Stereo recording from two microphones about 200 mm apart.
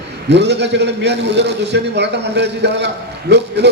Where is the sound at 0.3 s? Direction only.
60° right (ahead or behind).